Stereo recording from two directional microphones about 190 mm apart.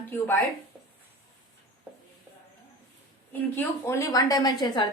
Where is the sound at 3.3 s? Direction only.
10° left (ahead or behind).